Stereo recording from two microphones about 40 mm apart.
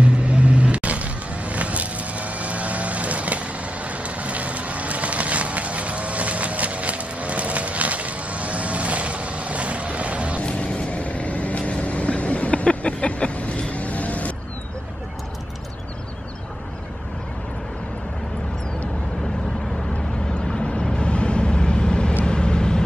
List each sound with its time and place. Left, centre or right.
0.0 s vehicle: right
10.4 s vehicle: left
19.9 s vehicle: left